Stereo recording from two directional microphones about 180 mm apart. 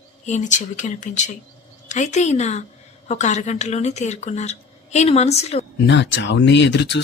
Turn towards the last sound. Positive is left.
turn(degrees=75)  # may be behind; listen again after turning